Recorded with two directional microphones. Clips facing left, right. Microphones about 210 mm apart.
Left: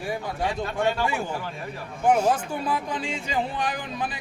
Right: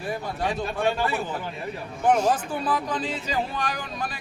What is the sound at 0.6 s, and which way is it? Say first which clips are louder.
Speech: even; 15° right (ahead or behind).